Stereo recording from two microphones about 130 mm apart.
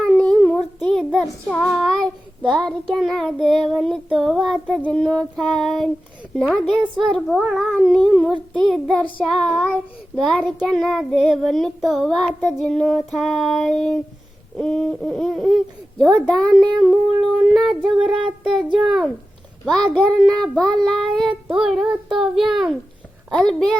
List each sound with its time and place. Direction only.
0.0 s child singing: 5° left (ahead or behind)